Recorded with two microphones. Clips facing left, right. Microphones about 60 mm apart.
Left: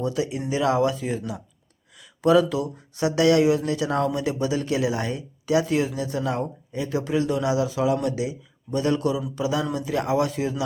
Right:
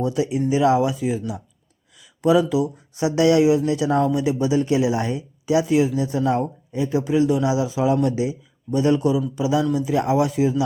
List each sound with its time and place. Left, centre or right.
0.0 s speech: right
6.3 s speech: right
6.8 s speech: centre